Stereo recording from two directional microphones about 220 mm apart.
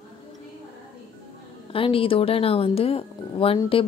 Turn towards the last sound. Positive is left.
turn(degrees=25)  # may be behind; listen again after turning